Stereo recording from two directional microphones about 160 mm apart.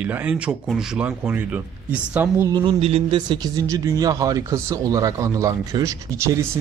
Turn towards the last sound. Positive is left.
turn(degrees=-20)  # may be behind; listen again after turning